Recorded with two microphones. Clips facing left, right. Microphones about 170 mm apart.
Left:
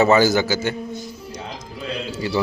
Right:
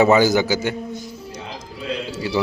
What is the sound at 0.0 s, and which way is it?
Speech, 15° right (ahead or behind).